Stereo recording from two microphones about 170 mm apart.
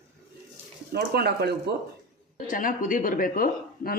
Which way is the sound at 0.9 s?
65° right (ahead or behind).